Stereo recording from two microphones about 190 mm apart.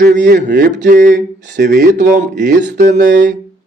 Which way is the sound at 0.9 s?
40° right (ahead or behind).